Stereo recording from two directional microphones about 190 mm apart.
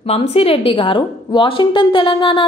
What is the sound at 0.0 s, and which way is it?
A woman's voice, 30° left (ahead or behind).